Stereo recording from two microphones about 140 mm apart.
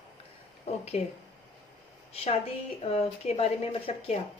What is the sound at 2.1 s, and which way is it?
Speech, 45° left (ahead or behind).